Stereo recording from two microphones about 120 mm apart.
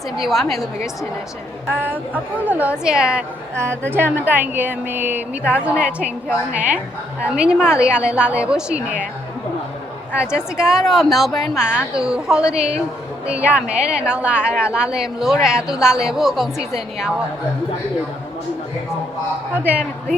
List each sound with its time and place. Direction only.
0.2 s a woman's voice: centre (ahead or behind)
1.8 s a woman's voice: 15° right (ahead or behind)
3.5 s a woman's voice: 20° right (ahead or behind)
10.2 s a woman's voice: 5° right (ahead or behind)
19.6 s a woman's voice: 10° right (ahead or behind)